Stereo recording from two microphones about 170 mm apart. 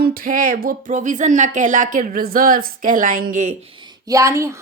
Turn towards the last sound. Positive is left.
turn(degrees=-15)  # may be behind; listen again after turning